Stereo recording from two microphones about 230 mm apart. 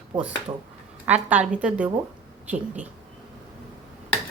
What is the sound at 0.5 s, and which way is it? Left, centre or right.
Speech, centre.